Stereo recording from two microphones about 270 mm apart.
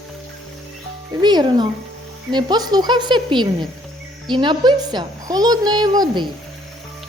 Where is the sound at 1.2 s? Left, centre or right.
Centre.